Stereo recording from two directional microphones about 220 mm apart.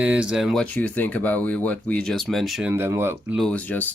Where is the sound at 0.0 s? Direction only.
5° right (ahead or behind).